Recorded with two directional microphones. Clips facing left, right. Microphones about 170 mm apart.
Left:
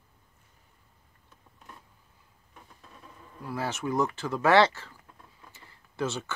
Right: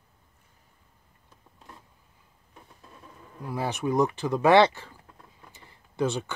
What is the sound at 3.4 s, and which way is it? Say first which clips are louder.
Speech: right 3 dB; 15° right (ahead or behind).